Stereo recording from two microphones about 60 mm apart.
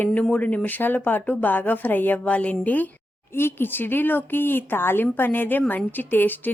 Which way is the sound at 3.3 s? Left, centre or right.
Left.